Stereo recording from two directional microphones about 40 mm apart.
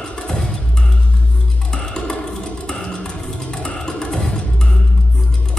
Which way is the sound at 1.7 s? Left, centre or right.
Centre.